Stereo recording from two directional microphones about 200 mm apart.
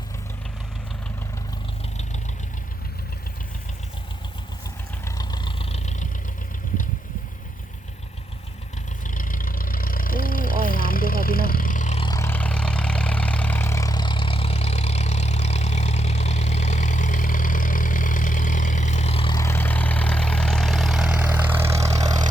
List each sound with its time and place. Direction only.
5.0 s vehicle: 20° left (ahead or behind)
9.0 s vehicle: 45° left (ahead or behind)
12.0 s vehicle: 15° left (ahead or behind)
19.4 s vehicle: 10° left (ahead or behind); by 22.2 s 20° right (ahead or behind)